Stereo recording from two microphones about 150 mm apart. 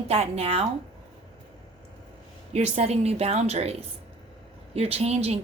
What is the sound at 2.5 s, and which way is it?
A woman's voice, 45° right (ahead or behind).